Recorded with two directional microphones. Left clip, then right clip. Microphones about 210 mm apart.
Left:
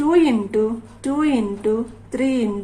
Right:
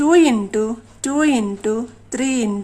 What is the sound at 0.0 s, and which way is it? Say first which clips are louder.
A woman's voice: right 3 dB; 40° right (ahead or behind).